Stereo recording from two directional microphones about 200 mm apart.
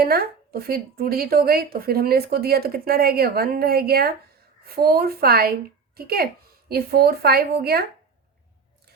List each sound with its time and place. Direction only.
0.0 s speech: 50° right (ahead or behind)